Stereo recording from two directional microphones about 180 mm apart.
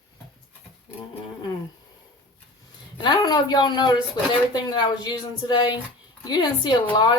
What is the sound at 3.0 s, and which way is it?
Speech, 25° left (ahead or behind).